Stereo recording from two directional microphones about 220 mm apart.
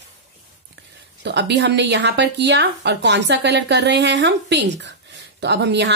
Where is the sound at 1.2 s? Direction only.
50° right (ahead or behind).